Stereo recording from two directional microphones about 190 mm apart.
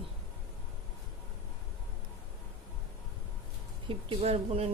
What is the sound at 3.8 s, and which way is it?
Speech, 30° right (ahead or behind).